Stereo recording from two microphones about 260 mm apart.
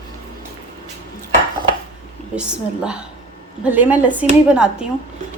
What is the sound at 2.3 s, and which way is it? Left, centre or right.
Speech, centre.